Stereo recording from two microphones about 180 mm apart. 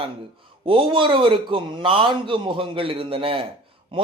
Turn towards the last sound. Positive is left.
turn(degrees=-30)  # may be behind; listen again after turning